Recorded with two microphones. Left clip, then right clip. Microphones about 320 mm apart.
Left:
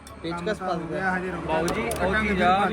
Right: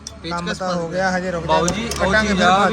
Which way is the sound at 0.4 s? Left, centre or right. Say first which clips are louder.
Right 3 dB; centre.